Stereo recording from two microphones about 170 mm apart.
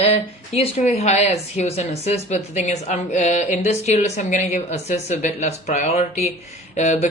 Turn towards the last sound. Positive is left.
turn(degrees=45)  # may be behind; listen again after turning